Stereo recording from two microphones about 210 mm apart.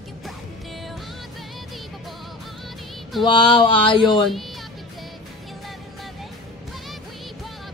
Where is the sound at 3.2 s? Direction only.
25° left (ahead or behind).